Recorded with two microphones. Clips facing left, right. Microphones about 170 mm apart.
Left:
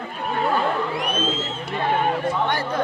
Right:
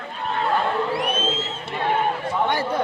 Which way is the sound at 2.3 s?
10° right (ahead or behind).